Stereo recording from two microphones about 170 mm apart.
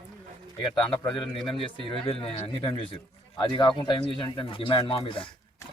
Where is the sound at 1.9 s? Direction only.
35° left (ahead or behind).